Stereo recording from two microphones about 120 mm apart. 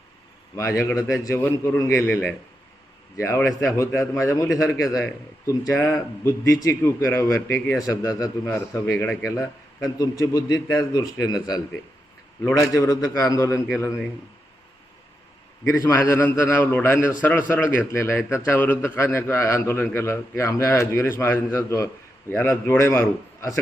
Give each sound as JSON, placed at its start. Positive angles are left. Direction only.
{"t": 0.5, "sound": "a man's voice", "side_deg": 25}
{"t": 15.8, "sound": "a man's voice", "side_deg": 25}